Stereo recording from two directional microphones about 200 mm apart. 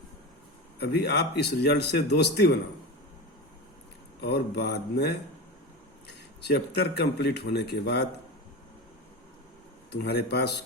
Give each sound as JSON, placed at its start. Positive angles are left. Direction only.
{"t": 0.8, "sound": "speech", "side_deg": 55}
{"t": 4.2, "sound": "speech", "side_deg": 55}
{"t": 9.9, "sound": "speech", "side_deg": 55}